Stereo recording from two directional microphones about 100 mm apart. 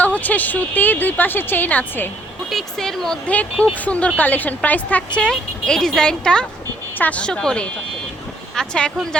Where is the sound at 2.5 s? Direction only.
5° left (ahead or behind).